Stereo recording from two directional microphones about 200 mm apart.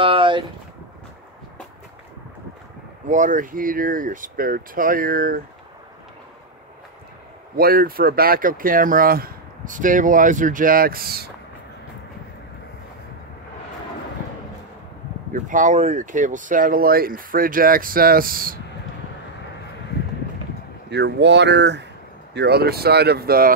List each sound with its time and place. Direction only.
0.0 s boat: 25° right (ahead or behind)
3.1 s speech: 40° right (ahead or behind)
7.5 s speech: 50° right (ahead or behind)
15.3 s speech: 40° right (ahead or behind)
20.9 s speech: 60° right (ahead or behind)